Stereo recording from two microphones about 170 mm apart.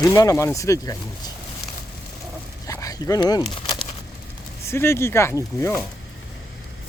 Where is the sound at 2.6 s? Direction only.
20° left (ahead or behind).